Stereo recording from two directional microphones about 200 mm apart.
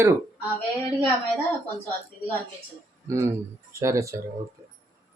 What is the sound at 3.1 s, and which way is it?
Speech, 15° right (ahead or behind).